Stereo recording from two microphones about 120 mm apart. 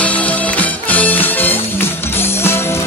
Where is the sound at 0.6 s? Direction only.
15° left (ahead or behind).